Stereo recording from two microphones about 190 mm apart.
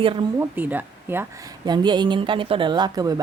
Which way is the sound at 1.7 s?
25° right (ahead or behind).